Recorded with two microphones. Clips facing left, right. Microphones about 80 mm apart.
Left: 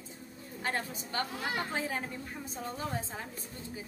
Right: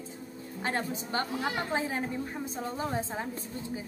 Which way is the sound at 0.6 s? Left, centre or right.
Right.